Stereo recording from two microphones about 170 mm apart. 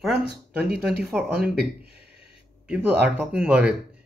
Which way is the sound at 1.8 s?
70° right (ahead or behind).